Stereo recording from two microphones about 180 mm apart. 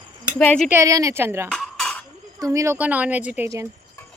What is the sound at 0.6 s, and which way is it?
Speech, 15° right (ahead or behind).